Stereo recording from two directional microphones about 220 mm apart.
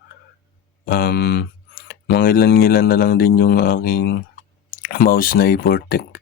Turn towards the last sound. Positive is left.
turn(degrees=40)  # may be behind; listen again after turning